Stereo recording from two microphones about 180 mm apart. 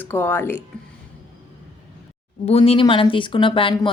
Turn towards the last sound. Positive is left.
turn(degrees=30)  # may be behind; listen again after turning